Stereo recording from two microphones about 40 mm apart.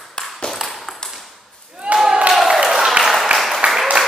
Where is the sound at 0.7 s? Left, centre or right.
Centre.